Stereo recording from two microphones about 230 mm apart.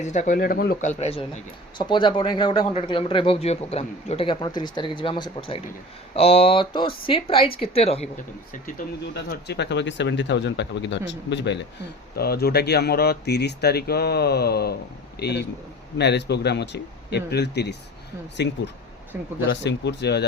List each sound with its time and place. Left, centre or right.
0.0 s speech: left
9.1 s speech: left
19.1 s speech: centre
19.5 s speech: left